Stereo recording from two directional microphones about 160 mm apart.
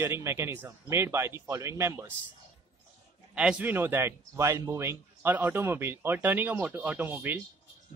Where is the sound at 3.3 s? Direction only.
5° right (ahead or behind).